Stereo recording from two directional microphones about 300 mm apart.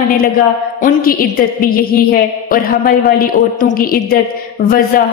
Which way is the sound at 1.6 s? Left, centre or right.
Left.